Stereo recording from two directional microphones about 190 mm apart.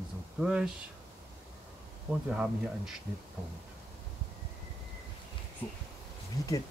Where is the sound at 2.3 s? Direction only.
Centre (ahead or behind).